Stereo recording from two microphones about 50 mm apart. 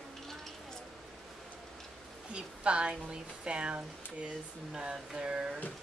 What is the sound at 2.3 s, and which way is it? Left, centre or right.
Speech, right.